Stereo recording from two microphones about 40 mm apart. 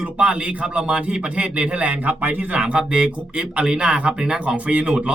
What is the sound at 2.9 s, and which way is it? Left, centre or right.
A man's voice, right.